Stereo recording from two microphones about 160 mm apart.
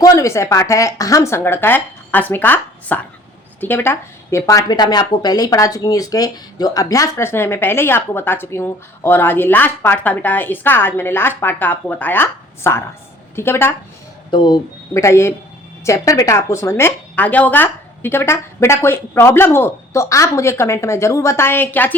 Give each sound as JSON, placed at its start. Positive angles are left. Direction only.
{"t": 0.0, "sound": "speech", "side_deg": 20}
{"t": 14.3, "sound": "speech", "side_deg": 30}